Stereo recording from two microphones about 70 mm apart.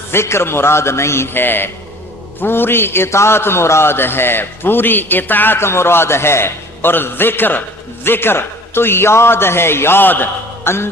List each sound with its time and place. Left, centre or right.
0.1 s a man's voice: left